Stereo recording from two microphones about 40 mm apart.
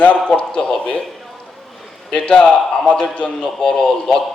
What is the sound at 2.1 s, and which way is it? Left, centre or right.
A man's voice, left.